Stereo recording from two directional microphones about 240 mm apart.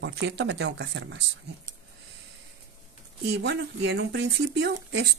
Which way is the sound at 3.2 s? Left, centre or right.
Right.